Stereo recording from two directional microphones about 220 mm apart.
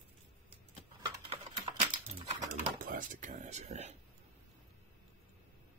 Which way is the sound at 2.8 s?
40° right (ahead or behind).